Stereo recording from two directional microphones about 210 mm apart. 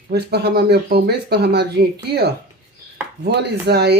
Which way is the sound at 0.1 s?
50° right (ahead or behind).